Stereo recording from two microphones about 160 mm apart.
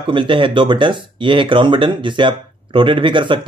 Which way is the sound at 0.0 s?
30° right (ahead or behind).